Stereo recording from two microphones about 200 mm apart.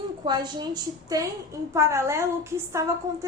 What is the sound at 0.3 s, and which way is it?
A woman's voice, 20° right (ahead or behind).